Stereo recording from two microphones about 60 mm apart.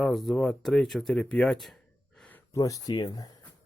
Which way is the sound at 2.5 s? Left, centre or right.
Left.